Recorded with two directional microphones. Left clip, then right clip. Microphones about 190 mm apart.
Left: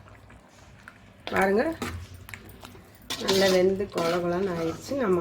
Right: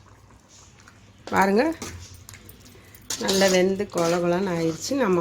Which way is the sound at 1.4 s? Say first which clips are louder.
Right 3 dB; 55° right (ahead or behind).